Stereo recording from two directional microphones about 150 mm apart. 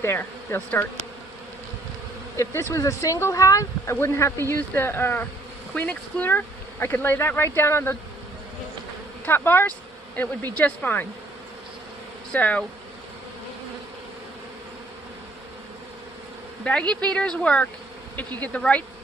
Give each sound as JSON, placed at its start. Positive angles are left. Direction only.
{"t": 0.0, "sound": "speech", "side_deg": 15}
{"t": 2.3, "sound": "speech", "side_deg": 20}
{"t": 9.2, "sound": "speech", "side_deg": 15}
{"t": 12.3, "sound": "speech", "side_deg": 10}
{"t": 16.9, "sound": "speech", "side_deg": 5}